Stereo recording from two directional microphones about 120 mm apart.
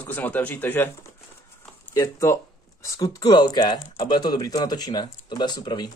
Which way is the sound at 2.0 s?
25° left (ahead or behind).